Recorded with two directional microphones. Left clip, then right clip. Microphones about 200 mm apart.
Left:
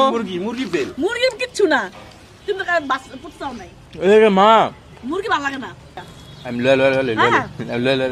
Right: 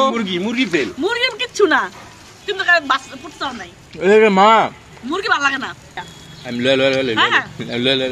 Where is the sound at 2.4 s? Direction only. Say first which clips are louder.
Right 4 dB; 10° left (ahead or behind).